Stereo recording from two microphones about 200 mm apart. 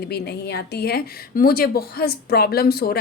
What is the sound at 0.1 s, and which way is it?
A woman's voice, 55° left (ahead or behind).